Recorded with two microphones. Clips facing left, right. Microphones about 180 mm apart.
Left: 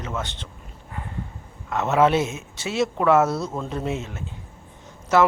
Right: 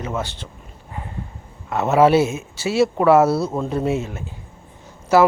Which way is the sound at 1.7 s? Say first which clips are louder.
Right 4 dB; 10° right (ahead or behind).